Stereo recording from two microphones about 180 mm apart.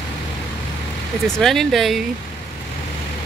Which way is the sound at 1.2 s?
Centre (ahead or behind).